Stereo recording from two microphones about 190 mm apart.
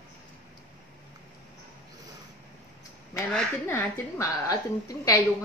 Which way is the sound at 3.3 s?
10° left (ahead or behind).